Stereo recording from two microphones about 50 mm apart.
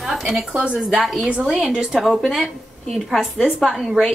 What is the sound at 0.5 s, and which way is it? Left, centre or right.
Speech, centre.